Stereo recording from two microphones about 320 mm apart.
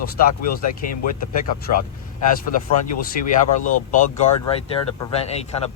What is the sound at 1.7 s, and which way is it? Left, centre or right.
Speech, left.